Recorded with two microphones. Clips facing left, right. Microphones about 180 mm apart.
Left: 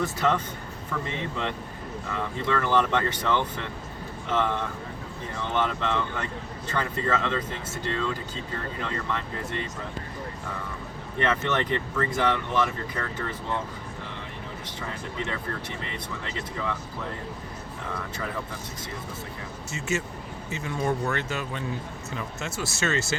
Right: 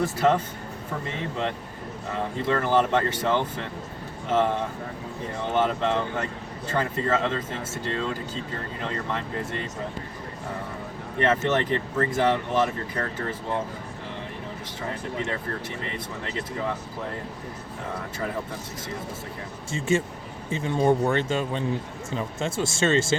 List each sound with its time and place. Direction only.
0.2 s speech: 45° right (ahead or behind)
2.1 s speech: 35° right (ahead or behind)
8.8 s speech: 35° right (ahead or behind)
11.2 s speech: 40° right (ahead or behind)
14.8 s speech: 40° right (ahead or behind)
19.7 s speech: 30° right (ahead or behind)